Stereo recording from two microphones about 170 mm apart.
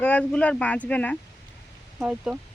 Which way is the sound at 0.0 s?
10° left (ahead or behind).